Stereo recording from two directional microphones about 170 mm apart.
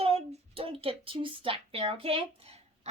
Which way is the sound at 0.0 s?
35° right (ahead or behind).